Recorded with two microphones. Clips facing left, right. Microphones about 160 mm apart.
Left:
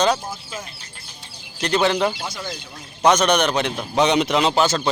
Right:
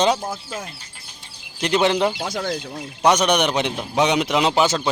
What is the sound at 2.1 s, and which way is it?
Speech, 60° right (ahead or behind).